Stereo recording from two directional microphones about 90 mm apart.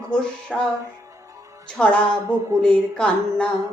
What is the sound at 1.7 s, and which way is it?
Speech, 10° left (ahead or behind).